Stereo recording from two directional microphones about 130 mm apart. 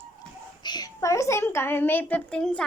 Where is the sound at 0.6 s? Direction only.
35° left (ahead or behind).